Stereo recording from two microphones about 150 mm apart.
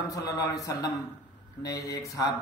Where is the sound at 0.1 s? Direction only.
25° left (ahead or behind).